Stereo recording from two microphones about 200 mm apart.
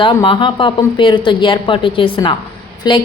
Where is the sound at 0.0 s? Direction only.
25° left (ahead or behind).